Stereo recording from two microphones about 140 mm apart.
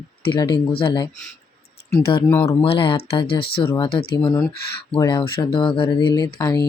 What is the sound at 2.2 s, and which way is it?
Speech, 15° left (ahead or behind).